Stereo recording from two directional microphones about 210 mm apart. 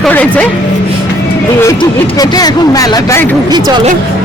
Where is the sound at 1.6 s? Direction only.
20° left (ahead or behind).